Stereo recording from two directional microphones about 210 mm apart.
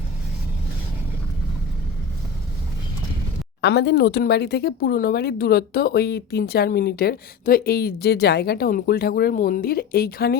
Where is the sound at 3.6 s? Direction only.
55° left (ahead or behind).